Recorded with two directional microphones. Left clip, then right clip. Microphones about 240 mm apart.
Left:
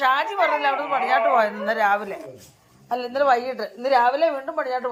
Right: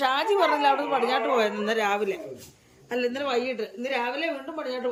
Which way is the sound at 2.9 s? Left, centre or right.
Left.